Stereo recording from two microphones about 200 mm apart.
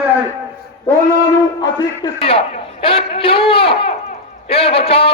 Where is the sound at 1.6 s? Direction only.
20° left (ahead or behind).